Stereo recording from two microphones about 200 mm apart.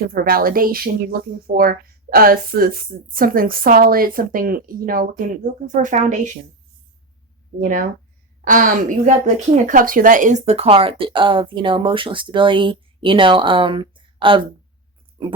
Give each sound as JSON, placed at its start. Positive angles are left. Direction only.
{"t": 0.1, "sound": "speech", "side_deg": -45}
{"t": 7.6, "sound": "speech", "side_deg": -45}